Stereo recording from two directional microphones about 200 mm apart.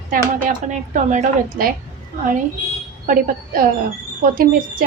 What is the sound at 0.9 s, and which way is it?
Speech, 40° right (ahead or behind).